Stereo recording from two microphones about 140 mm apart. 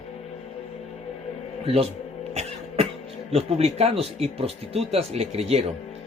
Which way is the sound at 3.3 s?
50° right (ahead or behind).